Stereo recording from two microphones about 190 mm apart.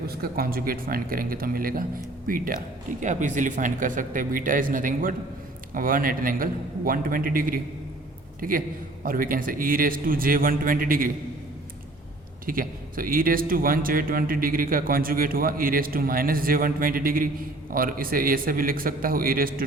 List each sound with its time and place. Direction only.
0.1 s a man's voice: 50° right (ahead or behind)
12.5 s speech: 50° right (ahead or behind)